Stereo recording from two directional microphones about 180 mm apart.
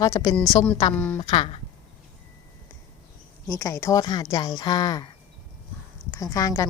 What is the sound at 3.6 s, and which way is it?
A woman's voice, 15° left (ahead or behind).